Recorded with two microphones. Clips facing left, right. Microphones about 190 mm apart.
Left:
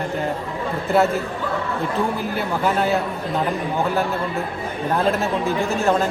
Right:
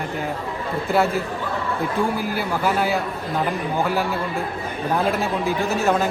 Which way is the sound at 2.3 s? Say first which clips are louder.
Left 1 dB; 5° right (ahead or behind).